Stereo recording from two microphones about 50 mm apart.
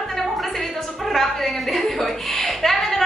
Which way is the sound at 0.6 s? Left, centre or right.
Centre.